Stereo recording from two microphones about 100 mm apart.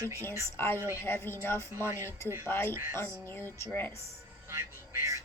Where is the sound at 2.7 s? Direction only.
30° right (ahead or behind).